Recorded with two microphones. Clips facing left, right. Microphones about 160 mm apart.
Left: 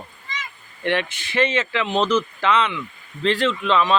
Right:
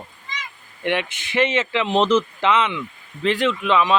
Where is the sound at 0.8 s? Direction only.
15° right (ahead or behind).